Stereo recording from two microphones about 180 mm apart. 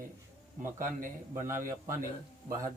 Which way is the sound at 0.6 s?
45° right (ahead or behind).